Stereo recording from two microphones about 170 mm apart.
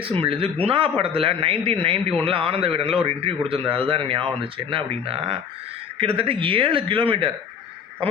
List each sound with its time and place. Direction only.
0.0 s a man's voice: 30° right (ahead or behind)